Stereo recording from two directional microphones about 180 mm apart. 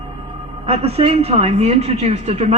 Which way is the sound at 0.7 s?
35° right (ahead or behind).